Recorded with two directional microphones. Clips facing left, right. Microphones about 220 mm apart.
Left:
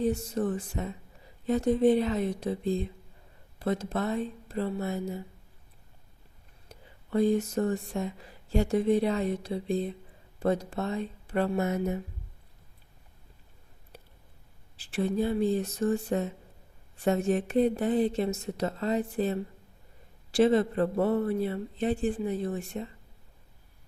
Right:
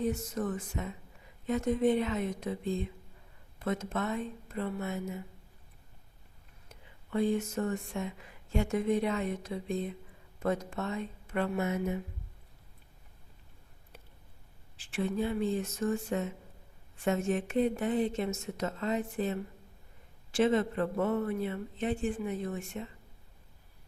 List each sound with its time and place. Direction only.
0.0 s speech: 30° left (ahead or behind)
6.7 s speech: 40° left (ahead or behind)
13.9 s a sound: 35° left (ahead or behind)
14.8 s speech: 35° left (ahead or behind)